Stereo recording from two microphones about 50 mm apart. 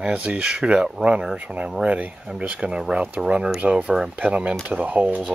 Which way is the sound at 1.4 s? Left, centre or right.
Right.